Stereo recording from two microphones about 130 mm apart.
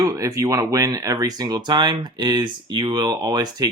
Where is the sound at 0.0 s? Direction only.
25° right (ahead or behind).